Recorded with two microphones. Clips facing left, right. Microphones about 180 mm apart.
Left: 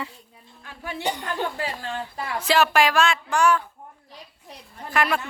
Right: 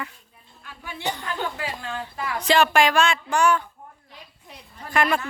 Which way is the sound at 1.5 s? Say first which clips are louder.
Left 1 dB; 35° left (ahead or behind).